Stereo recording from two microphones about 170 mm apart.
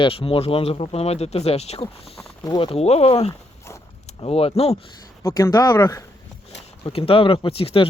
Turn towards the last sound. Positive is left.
turn(degrees=35)  # may be behind; listen again after turning